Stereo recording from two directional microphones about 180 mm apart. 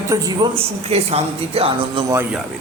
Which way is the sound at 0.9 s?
35° right (ahead or behind).